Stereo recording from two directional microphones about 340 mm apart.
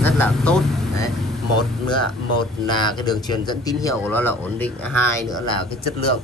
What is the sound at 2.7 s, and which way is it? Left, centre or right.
Speech, centre.